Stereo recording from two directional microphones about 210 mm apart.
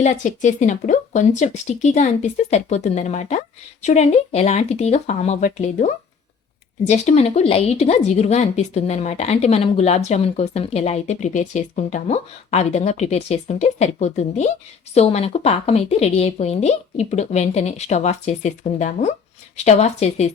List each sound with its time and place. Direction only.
0.0 s speech: 35° left (ahead or behind)